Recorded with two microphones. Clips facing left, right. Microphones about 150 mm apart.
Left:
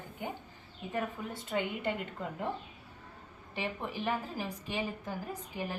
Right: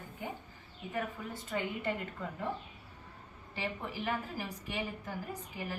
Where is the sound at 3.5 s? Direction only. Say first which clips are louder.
Left 2 dB; 20° left (ahead or behind).